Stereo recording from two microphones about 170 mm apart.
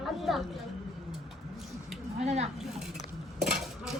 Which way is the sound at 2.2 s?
40° right (ahead or behind).